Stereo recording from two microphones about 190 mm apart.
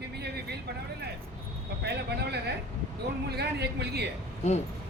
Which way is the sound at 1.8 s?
60° right (ahead or behind).